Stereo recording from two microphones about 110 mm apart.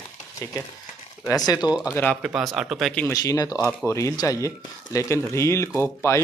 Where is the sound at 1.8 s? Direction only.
20° left (ahead or behind).